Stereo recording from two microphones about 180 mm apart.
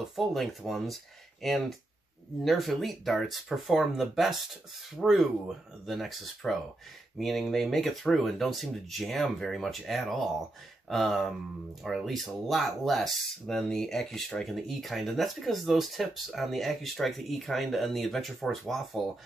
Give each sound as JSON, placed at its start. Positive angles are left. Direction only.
{"t": 0.0, "sound": "speech", "side_deg": 0}